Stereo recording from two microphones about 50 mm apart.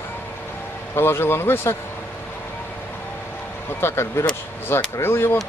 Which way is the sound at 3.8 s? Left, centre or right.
Left.